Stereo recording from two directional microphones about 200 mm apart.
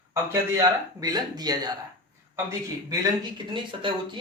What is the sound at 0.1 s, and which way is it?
Speech, 15° right (ahead or behind).